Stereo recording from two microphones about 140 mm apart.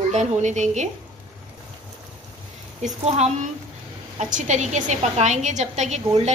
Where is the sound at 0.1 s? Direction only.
60° right (ahead or behind).